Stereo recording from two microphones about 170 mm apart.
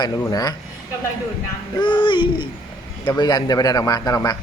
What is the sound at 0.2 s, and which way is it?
Speech, 20° left (ahead or behind).